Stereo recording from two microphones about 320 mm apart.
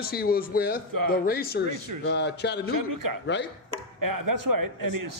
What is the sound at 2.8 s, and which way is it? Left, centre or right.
A man's voice, right.